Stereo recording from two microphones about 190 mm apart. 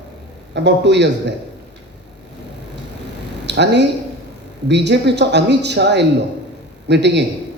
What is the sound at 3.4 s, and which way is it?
Speech, 65° right (ahead or behind).